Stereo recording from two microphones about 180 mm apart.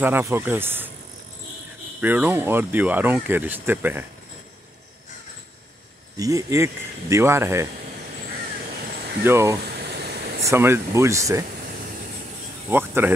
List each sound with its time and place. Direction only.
0.0 s speech: 10° right (ahead or behind)
2.0 s speech: 10° right (ahead or behind)
6.1 s speech: 20° right (ahead or behind)
8.8 s a sound: 55° right (ahead or behind)
9.2 s speech: 15° right (ahead or behind)
9.8 s a sound: 65° right (ahead or behind)
10.4 s speech: 15° right (ahead or behind)
12.6 s speech: 10° right (ahead or behind)